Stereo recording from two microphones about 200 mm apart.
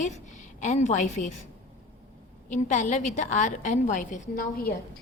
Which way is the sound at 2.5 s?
40° left (ahead or behind).